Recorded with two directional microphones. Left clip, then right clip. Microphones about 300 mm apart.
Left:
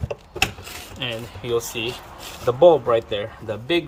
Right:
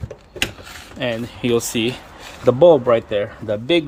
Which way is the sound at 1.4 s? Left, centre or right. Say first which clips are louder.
Right 5 dB; right.